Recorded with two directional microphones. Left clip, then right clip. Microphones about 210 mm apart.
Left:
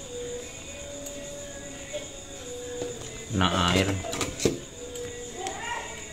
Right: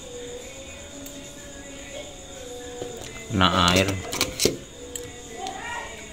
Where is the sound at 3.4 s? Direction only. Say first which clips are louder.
Right 5 dB; 20° right (ahead or behind).